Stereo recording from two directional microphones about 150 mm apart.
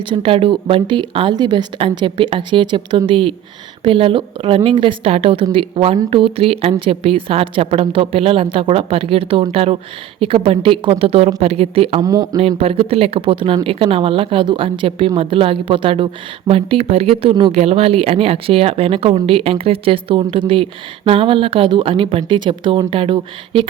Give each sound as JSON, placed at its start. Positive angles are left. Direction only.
{"t": 0.1, "sound": "a woman's voice", "side_deg": -40}
{"t": 12.0, "sound": "speech", "side_deg": -25}
{"t": 12.4, "sound": "a woman's voice", "side_deg": -40}
{"t": 17.5, "sound": "a woman's voice", "side_deg": -45}